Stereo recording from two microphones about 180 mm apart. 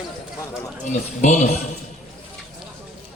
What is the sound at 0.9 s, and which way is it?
Speech, 40° left (ahead or behind).